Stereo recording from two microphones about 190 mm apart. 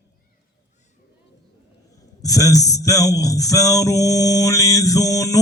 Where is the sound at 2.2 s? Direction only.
20° left (ahead or behind).